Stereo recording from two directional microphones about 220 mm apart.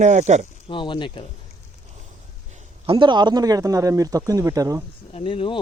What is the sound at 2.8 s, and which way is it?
Speech, 20° right (ahead or behind).